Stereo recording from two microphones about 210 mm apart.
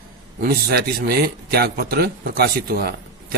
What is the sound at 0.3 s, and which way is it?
A man's voice, 45° right (ahead or behind).